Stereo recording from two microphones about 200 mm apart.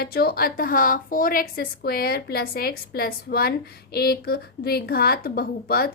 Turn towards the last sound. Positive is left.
turn(degrees=50)  # may be behind; listen again after turning